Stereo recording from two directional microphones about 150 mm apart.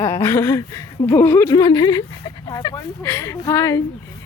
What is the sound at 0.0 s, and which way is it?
Speech, 20° left (ahead or behind).